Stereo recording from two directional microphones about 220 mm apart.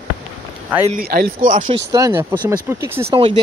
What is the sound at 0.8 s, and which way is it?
Speech, 40° right (ahead or behind).